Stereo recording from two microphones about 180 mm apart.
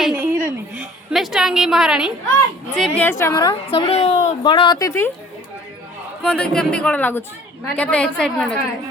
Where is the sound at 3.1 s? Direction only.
15° left (ahead or behind).